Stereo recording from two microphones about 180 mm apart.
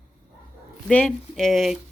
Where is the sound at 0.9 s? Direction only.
5° left (ahead or behind).